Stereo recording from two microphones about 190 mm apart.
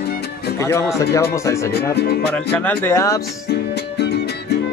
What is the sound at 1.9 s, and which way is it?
Speech, 60° left (ahead or behind).